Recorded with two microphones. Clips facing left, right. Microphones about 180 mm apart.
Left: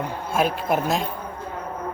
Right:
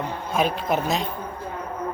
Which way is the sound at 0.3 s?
10° left (ahead or behind).